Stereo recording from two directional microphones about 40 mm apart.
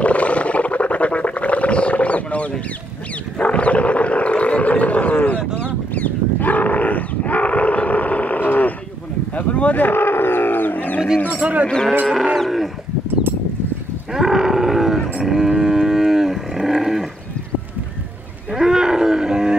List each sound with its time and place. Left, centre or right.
0.0 s a sound: left
9.3 s a sound: left
9.8 s roaring cats: left
11.6 s cattle: centre
12.4 s livestock: centre
14.1 s wild animals: centre
15.1 s cattle: centre
18.5 s wild animals: centre